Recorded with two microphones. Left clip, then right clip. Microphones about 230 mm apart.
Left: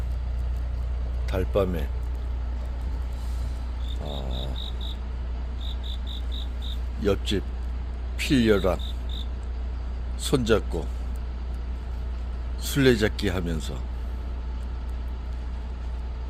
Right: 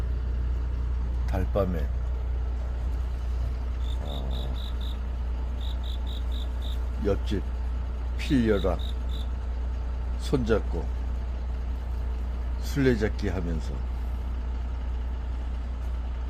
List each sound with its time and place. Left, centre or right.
1.3 s speech: left
7.0 s speech: left
10.2 s speech: left
12.6 s speech: left